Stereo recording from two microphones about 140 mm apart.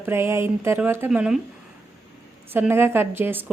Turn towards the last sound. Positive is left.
turn(degrees=-15)  # may be behind; listen again after turning